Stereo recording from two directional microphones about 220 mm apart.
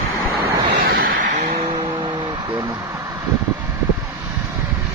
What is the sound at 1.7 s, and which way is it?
Music, 20° right (ahead or behind).